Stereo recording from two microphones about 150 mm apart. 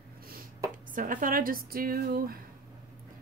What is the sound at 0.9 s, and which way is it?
A woman's voice, 65° right (ahead or behind).